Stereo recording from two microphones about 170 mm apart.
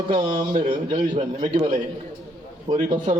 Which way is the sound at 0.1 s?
30° right (ahead or behind).